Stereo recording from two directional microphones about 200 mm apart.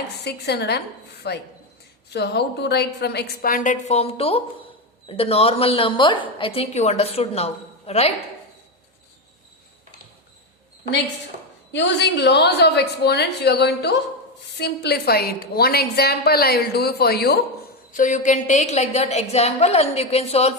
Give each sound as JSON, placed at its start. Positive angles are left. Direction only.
{"t": 0.3, "sound": "a woman's voice", "side_deg": 55}
{"t": 11.7, "sound": "a woman's voice", "side_deg": 60}
{"t": 17.9, "sound": "a woman's voice", "side_deg": 40}